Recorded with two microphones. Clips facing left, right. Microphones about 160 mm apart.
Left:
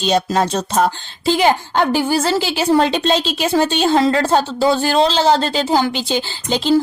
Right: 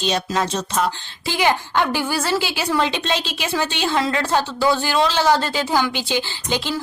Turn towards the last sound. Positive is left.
turn(degrees=35)  # may be behind; listen again after turning